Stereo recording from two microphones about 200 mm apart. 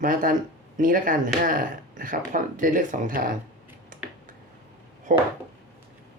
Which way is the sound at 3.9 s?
45° right (ahead or behind).